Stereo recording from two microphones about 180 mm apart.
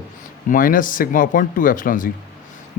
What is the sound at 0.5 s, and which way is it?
Speech, 50° left (ahead or behind).